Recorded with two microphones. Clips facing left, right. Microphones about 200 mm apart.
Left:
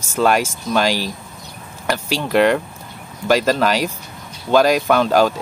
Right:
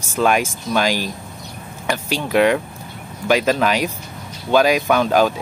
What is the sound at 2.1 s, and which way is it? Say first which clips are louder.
Speech: left 1 dB; 5° right (ahead or behind).